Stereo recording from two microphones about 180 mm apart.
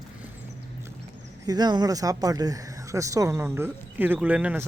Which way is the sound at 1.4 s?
20° right (ahead or behind).